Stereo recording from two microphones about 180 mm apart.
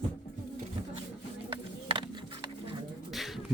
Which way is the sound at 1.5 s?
30° right (ahead or behind).